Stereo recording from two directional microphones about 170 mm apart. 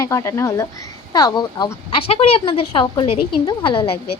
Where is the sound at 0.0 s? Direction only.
20° left (ahead or behind).